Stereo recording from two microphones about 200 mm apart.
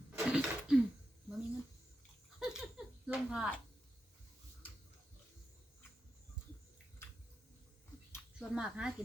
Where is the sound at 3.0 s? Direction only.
5° right (ahead or behind).